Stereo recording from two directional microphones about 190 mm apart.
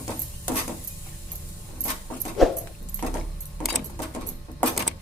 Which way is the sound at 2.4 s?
Centre (ahead or behind).